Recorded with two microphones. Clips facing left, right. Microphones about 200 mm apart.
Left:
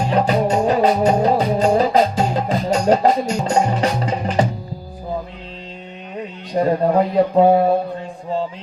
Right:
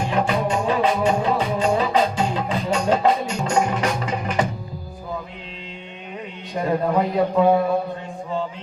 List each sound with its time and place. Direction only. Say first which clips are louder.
0.1 s music: left 5 dB; 35° left (ahead or behind)
6.5 s a man's voice: left 5 dB; 35° left (ahead or behind)
7.3 s a sound: left 4 dB; 35° left (ahead or behind)